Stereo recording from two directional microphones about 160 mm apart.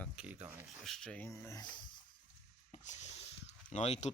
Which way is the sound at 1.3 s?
20° left (ahead or behind).